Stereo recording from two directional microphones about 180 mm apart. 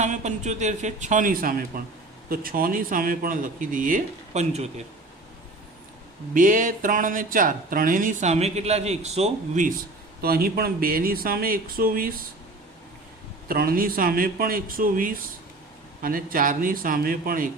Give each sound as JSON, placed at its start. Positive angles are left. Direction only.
{"t": 0.0, "sound": "a man's voice", "side_deg": -40}
{"t": 6.3, "sound": "speech", "side_deg": -50}
{"t": 10.2, "sound": "speech", "side_deg": -55}
{"t": 13.5, "sound": "speech", "side_deg": -55}